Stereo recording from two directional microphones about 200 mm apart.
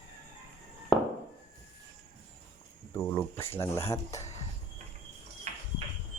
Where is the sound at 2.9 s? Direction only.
10° left (ahead or behind).